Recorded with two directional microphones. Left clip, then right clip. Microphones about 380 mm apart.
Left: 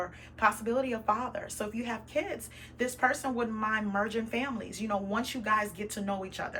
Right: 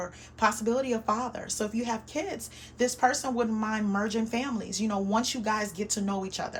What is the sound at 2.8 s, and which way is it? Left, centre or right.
Speech, centre.